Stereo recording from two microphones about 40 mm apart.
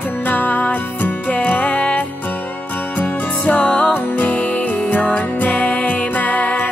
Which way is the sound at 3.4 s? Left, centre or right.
Left.